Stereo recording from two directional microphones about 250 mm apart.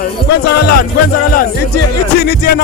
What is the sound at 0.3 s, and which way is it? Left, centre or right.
Music, left.